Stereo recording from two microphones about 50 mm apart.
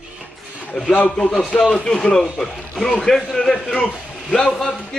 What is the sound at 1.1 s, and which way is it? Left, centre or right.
A man's voice, centre.